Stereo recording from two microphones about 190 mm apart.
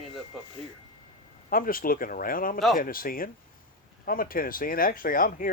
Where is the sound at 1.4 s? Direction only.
50° left (ahead or behind).